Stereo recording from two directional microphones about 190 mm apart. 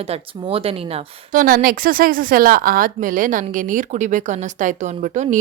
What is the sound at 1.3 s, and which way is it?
A woman's voice, 45° right (ahead or behind).